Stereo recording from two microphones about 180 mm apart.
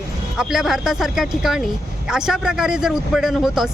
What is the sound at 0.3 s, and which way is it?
Speech, centre (ahead or behind).